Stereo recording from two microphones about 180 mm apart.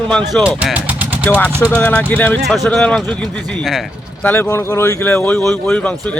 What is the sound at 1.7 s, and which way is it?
Speech, 10° left (ahead or behind).